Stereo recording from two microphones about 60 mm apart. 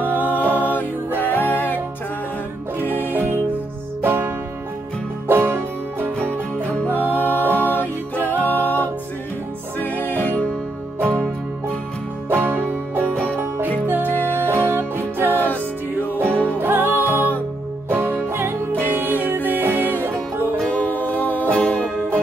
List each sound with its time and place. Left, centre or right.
0.0 s music: left
4.0 s music: right
5.3 s music: right
6.9 s music: left
12.3 s music: right
13.1 s music: centre
14.6 s music: right
15.3 s music: left
16.6 s music: right
18.7 s music: left
18.9 s music: right
20.7 s music: left